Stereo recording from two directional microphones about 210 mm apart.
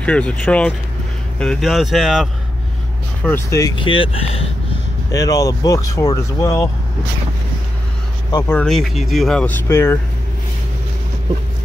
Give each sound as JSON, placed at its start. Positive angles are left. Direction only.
{"t": 0.0, "sound": "speech", "side_deg": 5}
{"t": 3.3, "sound": "speech", "side_deg": 15}
{"t": 5.1, "sound": "speech", "side_deg": 15}
{"t": 8.5, "sound": "speech", "side_deg": 5}